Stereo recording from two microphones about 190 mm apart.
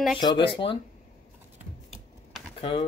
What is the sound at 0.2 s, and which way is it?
Speech, 25° left (ahead or behind).